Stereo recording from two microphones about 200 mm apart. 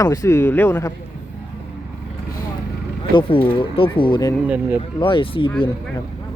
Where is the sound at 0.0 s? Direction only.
15° left (ahead or behind).